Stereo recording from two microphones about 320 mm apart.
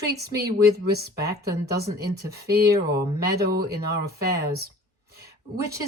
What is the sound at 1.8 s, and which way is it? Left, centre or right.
Speech, right.